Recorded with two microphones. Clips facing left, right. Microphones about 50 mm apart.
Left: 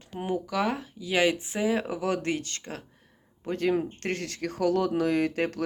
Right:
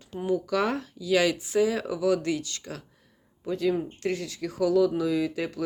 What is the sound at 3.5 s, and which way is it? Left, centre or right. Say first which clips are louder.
Speech: even; left.